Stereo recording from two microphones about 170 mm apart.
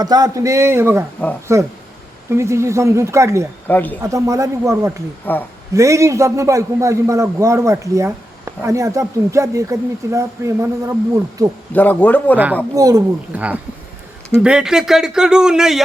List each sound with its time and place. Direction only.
0.0 s a man's voice: 25° right (ahead or behind)
3.7 s a man's voice: 10° left (ahead or behind)
4.0 s a man's voice: 20° right (ahead or behind)
5.2 s a man's voice: 10° left (ahead or behind)
5.7 s a man's voice: 20° right (ahead or behind)
11.7 s a man's voice: 10° left (ahead or behind)
12.7 s speech: 20° right (ahead or behind)
13.3 s a man's voice: 10° right (ahead or behind)